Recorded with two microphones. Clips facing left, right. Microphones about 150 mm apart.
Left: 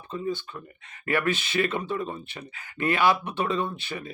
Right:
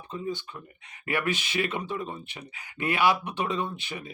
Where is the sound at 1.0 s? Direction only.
15° right (ahead or behind).